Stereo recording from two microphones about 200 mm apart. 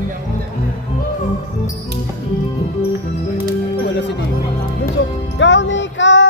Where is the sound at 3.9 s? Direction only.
60° left (ahead or behind).